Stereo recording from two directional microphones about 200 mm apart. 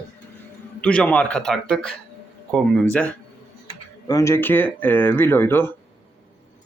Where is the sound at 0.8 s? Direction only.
5° left (ahead or behind).